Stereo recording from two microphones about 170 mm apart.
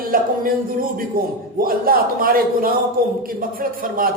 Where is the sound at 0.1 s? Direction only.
55° right (ahead or behind).